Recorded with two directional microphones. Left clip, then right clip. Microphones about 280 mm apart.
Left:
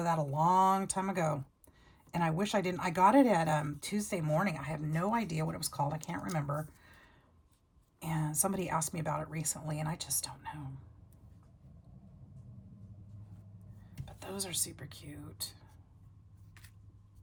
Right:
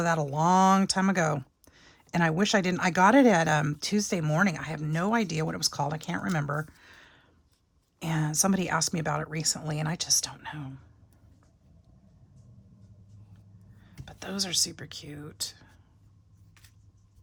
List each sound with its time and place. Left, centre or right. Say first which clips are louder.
0.0 s speech: right 4 dB; right
6.8 s a sound: right 7 dB; right
7.9 s speech: right 8 dB; right
14.0 s speech: right 8 dB; right